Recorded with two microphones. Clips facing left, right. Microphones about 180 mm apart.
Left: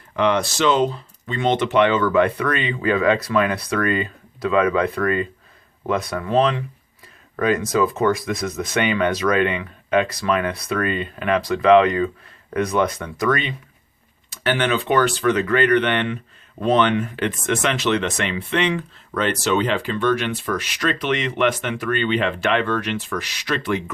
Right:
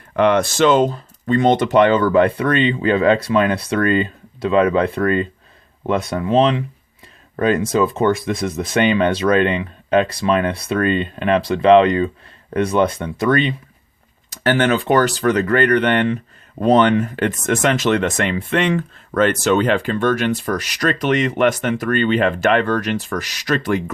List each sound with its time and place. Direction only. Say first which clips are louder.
0.2 s speech: right 5 dB; 55° right (ahead or behind); by 13.5 s 30° right (ahead or behind)
14.3 s speech: right 4 dB; 45° right (ahead or behind)